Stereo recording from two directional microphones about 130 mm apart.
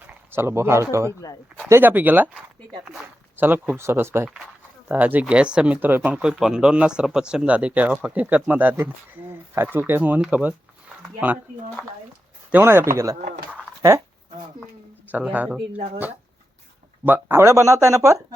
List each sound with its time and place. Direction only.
0.3 s speech: 20° right (ahead or behind)
3.3 s speech: 15° right (ahead or behind)
12.5 s speech: 15° right (ahead or behind)
13.5 s dog: 20° right (ahead or behind)
15.0 s speech: 10° right (ahead or behind)
17.1 s speech: 15° right (ahead or behind)